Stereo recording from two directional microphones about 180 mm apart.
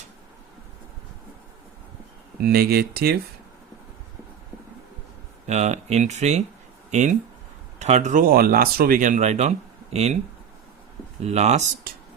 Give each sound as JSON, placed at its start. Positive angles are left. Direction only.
{"t": 2.4, "sound": "speech", "side_deg": -60}
{"t": 5.5, "sound": "speech", "side_deg": -40}
{"t": 11.2, "sound": "speech", "side_deg": -35}
{"t": 11.9, "sound": "a sound", "side_deg": -55}